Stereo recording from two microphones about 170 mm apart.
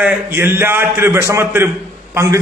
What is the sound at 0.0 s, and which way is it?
A man's voice, 10° right (ahead or behind).